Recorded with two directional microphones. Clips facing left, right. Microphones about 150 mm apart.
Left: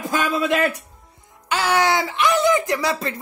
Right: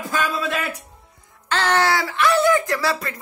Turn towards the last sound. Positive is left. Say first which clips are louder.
# left 1 dB
turn(degrees=20)  # may be behind; listen again after turning